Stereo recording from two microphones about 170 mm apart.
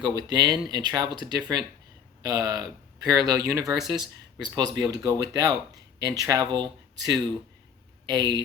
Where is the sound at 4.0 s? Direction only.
25° right (ahead or behind).